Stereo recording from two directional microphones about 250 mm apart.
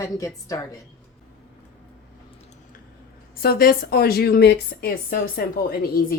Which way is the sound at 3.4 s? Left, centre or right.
Left.